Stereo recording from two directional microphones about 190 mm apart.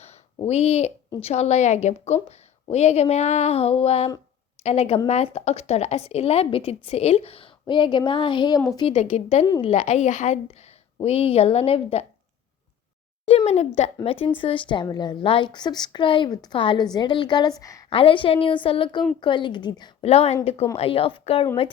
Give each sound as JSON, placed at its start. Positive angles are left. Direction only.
{"t": 0.0, "sound": "a sound", "side_deg": 35}
{"t": 1.2, "sound": "a woman's voice", "side_deg": 35}
{"t": 9.0, "sound": "a woman's voice", "side_deg": 35}
{"t": 13.2, "sound": "a woman's voice", "side_deg": 35}